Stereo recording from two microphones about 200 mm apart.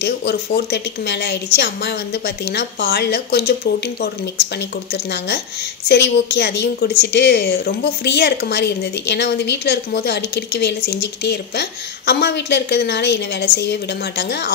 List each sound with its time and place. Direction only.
0.0 s a woman's voice: 55° left (ahead or behind)